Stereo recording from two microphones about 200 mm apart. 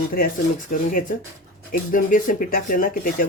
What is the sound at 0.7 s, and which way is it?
Speech, 45° left (ahead or behind).